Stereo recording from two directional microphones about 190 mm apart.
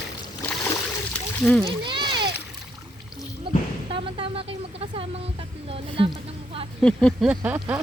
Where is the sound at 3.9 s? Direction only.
30° right (ahead or behind).